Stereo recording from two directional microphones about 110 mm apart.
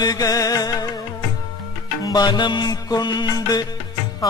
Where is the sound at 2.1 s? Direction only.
40° left (ahead or behind).